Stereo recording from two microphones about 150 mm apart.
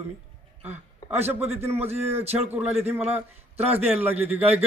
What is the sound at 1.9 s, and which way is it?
Speech, 45° right (ahead or behind).